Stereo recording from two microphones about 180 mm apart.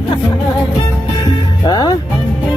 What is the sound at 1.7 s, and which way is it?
Music, 25° left (ahead or behind).